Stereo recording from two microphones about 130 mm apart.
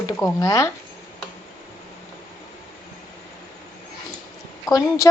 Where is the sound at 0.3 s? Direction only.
25° left (ahead or behind).